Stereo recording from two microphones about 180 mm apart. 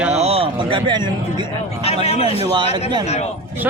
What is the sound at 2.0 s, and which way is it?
Speech, 35° left (ahead or behind).